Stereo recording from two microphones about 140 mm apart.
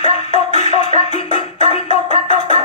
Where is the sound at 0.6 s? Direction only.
55° left (ahead or behind).